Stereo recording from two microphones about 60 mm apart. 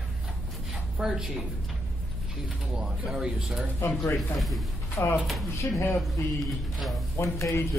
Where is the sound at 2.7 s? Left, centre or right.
Centre.